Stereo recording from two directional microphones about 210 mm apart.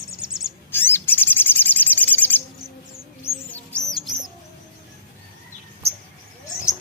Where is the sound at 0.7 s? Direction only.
10° left (ahead or behind).